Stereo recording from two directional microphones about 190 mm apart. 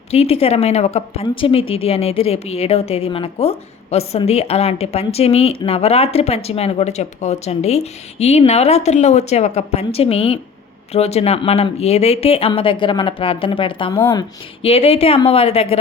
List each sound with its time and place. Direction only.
0.1 s a woman's voice: 35° left (ahead or behind)
13.9 s speech: 10° left (ahead or behind)
14.6 s a woman's voice: 30° left (ahead or behind)